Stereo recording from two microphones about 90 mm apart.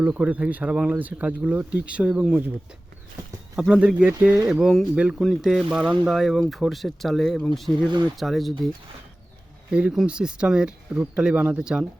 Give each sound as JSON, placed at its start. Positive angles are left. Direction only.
{"t": 0.0, "sound": "speech", "side_deg": -20}
{"t": 3.5, "sound": "speech", "side_deg": -5}
{"t": 7.8, "sound": "speech", "side_deg": -60}
{"t": 8.1, "sound": "speech", "side_deg": 0}
{"t": 9.7, "sound": "speech", "side_deg": -5}